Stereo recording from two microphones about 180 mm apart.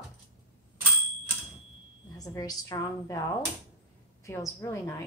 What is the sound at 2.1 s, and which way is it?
A woman's voice, 20° left (ahead or behind).